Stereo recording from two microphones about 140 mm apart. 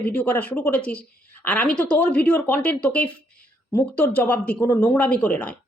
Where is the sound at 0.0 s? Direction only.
10° left (ahead or behind).